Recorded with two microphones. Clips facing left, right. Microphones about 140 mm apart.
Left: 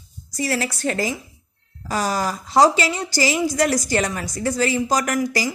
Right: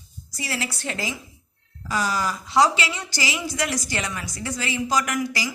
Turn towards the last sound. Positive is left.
turn(degrees=40)  # may be behind; listen again after turning